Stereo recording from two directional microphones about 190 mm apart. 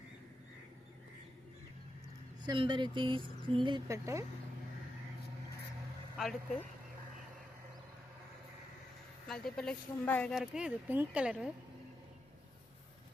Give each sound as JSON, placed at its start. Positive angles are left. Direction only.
{"t": 2.4, "sound": "speech", "side_deg": -25}
{"t": 6.1, "sound": "a woman's voice", "side_deg": 0}
{"t": 9.2, "sound": "a woman's voice", "side_deg": 5}